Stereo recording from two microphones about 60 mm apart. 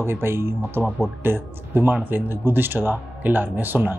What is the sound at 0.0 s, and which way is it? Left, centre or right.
Speech, right.